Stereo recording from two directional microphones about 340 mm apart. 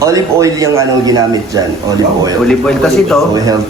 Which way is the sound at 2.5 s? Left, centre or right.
Centre.